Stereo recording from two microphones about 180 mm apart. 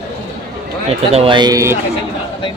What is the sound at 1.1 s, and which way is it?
Speech, 30° right (ahead or behind).